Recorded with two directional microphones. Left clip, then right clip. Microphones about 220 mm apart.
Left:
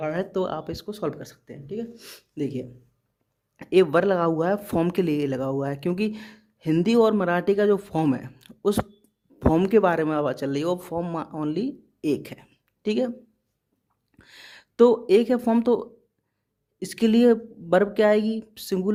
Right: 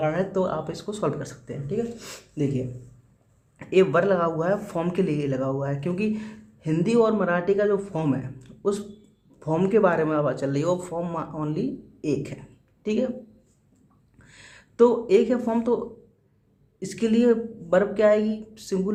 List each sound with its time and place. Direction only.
0.0 s speech: 45° left (ahead or behind)
14.2 s speech: 45° left (ahead or behind)